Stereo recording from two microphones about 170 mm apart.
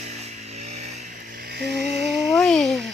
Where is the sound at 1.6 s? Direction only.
80° right.